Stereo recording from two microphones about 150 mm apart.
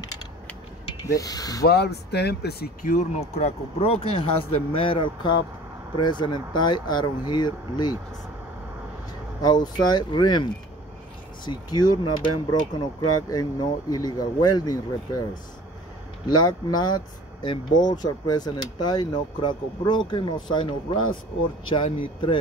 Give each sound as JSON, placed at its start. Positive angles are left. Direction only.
{"t": 1.0, "sound": "speech", "side_deg": 25}
{"t": 1.6, "sound": "speech", "side_deg": 90}
{"t": 9.4, "sound": "speech", "side_deg": 25}
{"t": 16.3, "sound": "speech", "side_deg": 30}